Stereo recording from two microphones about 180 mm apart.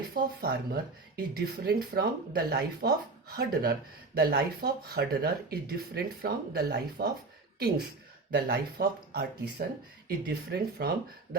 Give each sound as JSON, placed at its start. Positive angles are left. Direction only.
{"t": 0.1, "sound": "speech", "side_deg": -60}
{"t": 8.3, "sound": "speech", "side_deg": -60}